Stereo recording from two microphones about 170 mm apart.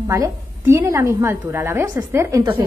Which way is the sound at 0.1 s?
20° right (ahead or behind).